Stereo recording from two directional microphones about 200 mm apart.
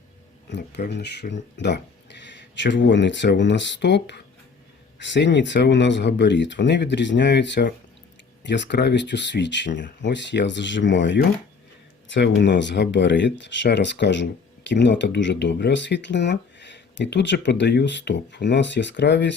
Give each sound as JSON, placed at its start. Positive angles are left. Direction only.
{"t": 0.9, "sound": "speech", "side_deg": 60}